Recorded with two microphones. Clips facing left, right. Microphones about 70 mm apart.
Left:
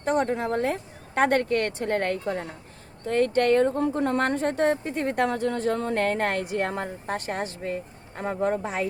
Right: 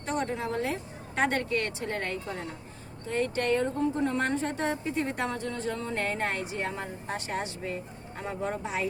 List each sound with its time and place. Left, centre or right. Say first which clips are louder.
0.0 s speech: left 6 dB; left